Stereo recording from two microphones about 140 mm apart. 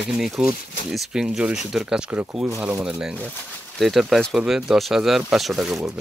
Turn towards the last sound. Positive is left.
turn(degrees=-5)  # may be behind; listen again after turning